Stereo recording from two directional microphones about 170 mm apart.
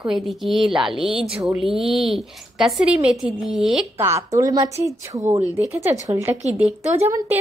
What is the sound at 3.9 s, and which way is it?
A woman's voice, 15° right (ahead or behind).